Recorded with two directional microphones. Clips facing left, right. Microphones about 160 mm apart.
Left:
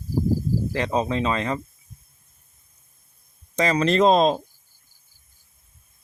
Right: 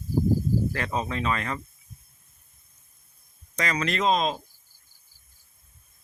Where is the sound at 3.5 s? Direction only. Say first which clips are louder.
Left 8 dB; 25° left (ahead or behind).